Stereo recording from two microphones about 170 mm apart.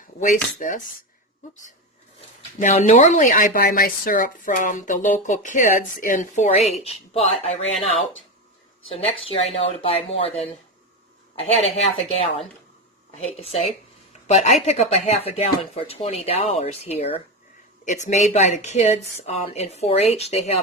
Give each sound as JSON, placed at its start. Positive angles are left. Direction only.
{"t": 0.6, "sound": "speech", "side_deg": 50}
{"t": 2.6, "sound": "speech", "side_deg": 50}
{"t": 9.3, "sound": "a woman's voice", "side_deg": 35}